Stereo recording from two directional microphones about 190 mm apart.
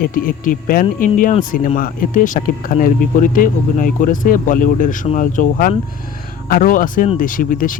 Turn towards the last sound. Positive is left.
turn(degrees=45)  # may be behind; listen again after turning